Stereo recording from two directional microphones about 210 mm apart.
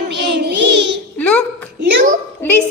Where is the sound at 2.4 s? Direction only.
10° left (ahead or behind).